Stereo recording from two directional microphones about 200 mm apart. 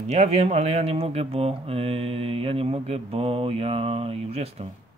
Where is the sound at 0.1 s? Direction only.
30° right (ahead or behind).